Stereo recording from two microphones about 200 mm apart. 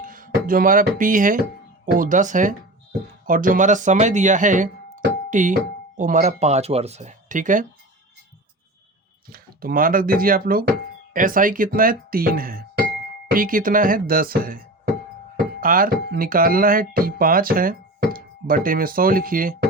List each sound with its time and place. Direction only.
0.0 s music: 45° right (ahead or behind)
0.4 s speech: 45° right (ahead or behind)
9.3 s speech: 45° right (ahead or behind)
15.6 s speech: 45° right (ahead or behind)